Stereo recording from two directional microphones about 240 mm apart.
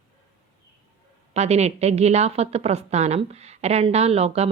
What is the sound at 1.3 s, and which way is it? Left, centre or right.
Speech, right.